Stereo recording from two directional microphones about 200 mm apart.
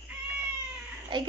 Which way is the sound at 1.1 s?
25° right (ahead or behind).